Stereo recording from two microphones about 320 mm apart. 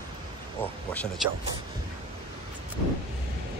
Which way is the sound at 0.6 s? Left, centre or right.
Centre.